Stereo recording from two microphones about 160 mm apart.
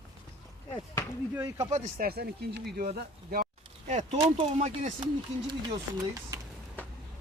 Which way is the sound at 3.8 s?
45° right (ahead or behind).